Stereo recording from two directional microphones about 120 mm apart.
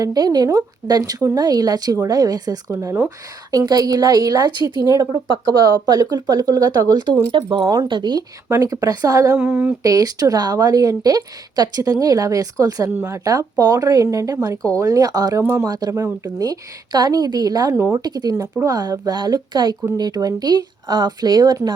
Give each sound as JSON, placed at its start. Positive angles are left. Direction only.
{"t": 0.0, "sound": "speech", "side_deg": -30}
{"t": 8.4, "sound": "a woman's voice", "side_deg": -25}
{"t": 9.4, "sound": "speech", "side_deg": -15}
{"t": 9.8, "sound": "a woman's voice", "side_deg": -30}
{"t": 15.6, "sound": "a woman's voice", "side_deg": -35}